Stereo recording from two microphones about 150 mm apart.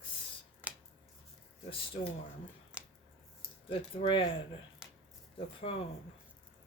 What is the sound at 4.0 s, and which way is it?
Speech, 35° left (ahead or behind).